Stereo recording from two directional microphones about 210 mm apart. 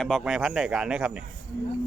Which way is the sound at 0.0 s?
Centre (ahead or behind).